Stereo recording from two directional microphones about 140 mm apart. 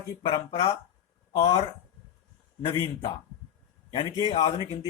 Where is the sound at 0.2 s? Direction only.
40° left (ahead or behind).